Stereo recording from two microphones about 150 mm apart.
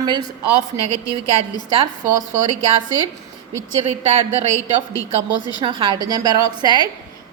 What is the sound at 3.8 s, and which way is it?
Speech, 45° right (ahead or behind).